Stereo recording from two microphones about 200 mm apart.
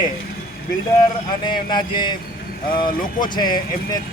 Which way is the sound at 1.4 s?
25° left (ahead or behind).